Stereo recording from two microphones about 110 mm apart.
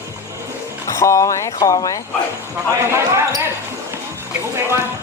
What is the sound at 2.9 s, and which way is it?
Speech, 25° right (ahead or behind).